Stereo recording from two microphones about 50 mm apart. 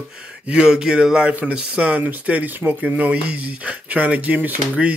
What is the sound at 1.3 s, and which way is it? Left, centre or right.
Speech, right.